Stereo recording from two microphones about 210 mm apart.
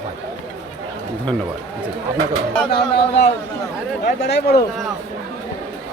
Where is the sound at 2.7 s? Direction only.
50° left (ahead or behind).